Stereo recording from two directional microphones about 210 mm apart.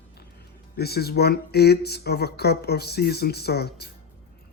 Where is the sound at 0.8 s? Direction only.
50° left (ahead or behind).